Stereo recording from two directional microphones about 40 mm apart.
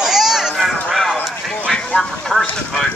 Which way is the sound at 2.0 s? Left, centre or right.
Centre.